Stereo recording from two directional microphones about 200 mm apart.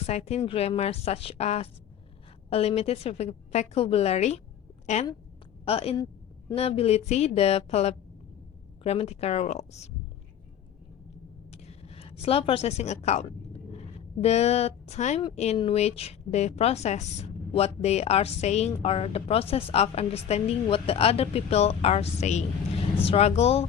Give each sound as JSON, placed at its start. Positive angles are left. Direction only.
{"t": 0.0, "sound": "a woman's voice", "side_deg": 30}
{"t": 5.6, "sound": "a woman's voice", "side_deg": 30}
{"t": 11.5, "sound": "a sound", "side_deg": 30}
{"t": 14.2, "sound": "a woman's voice", "side_deg": 30}